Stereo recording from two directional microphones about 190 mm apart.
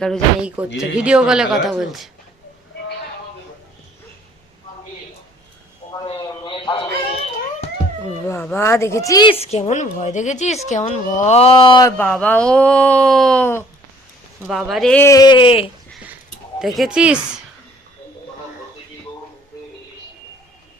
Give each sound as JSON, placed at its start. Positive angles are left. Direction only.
{"t": 0.0, "sound": "speech", "side_deg": 0}
{"t": 6.1, "sound": "a sound", "side_deg": 25}
{"t": 8.5, "sound": "a woman's voice", "side_deg": 15}
{"t": 11.9, "sound": "speech", "side_deg": 5}
{"t": 14.4, "sound": "speech", "side_deg": -5}
{"t": 15.0, "sound": "speech", "side_deg": 20}
{"t": 16.6, "sound": "speech", "side_deg": 0}